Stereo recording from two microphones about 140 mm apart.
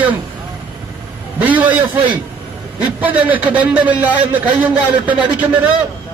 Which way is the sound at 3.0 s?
10° right (ahead or behind).